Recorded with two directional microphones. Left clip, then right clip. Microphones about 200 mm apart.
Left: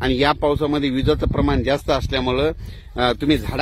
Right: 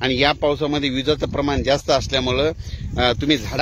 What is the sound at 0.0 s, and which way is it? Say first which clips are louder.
Speech: even; 40° left (ahead or behind).